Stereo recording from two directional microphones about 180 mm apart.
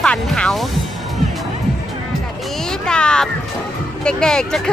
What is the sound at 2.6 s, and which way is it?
Speech, 5° left (ahead or behind).